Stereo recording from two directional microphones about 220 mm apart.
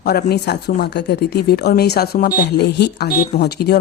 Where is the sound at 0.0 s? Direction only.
45° left (ahead or behind).